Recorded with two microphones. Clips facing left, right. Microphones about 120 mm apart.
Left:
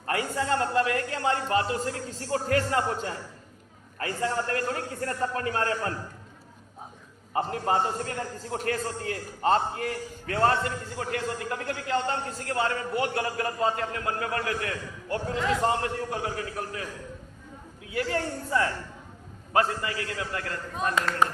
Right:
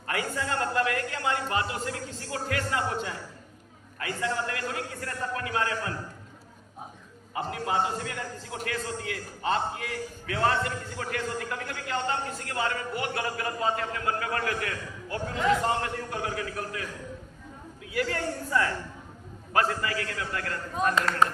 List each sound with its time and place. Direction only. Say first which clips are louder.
0.1 s a man's voice: left 3 dB; 30° left (ahead or behind)
7.3 s a man's voice: left 3 dB; 45° left (ahead or behind)
10.6 s a man's voice: left 1 dB; 30° left (ahead or behind)
17.9 s a man's voice: left 1 dB; 25° left (ahead or behind)